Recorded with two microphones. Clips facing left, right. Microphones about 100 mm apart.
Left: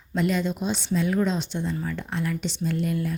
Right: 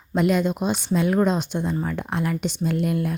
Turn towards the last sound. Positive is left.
turn(degrees=-55)  # may be behind; listen again after turning